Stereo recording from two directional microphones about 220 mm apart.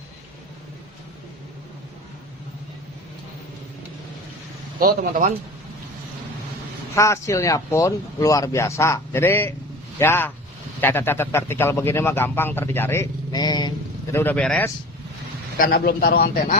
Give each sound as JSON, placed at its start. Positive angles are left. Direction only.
{"t": 4.8, "sound": "speech", "side_deg": -40}
{"t": 6.9, "sound": "speech", "side_deg": 15}
{"t": 15.5, "sound": "a man's voice", "side_deg": 40}